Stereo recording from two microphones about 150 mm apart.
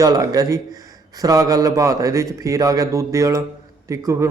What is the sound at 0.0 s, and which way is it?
A man's voice, 25° right (ahead or behind).